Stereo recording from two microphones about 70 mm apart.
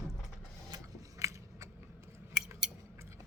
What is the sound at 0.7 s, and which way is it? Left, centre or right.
Biting, right.